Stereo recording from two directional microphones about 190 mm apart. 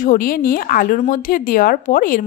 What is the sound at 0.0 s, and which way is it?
Speech, 45° left (ahead or behind).